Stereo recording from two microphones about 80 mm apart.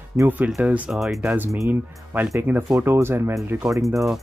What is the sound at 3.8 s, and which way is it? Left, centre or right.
Speech, right.